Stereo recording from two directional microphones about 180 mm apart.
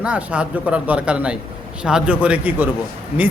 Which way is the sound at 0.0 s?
5° right (ahead or behind).